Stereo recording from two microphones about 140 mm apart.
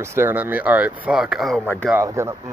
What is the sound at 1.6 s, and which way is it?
Speech, 10° left (ahead or behind).